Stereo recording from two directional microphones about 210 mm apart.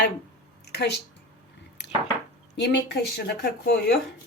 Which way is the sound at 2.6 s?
55° left (ahead or behind).